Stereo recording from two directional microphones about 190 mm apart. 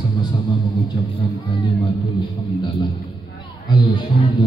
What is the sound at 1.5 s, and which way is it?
Music, 25° left (ahead or behind).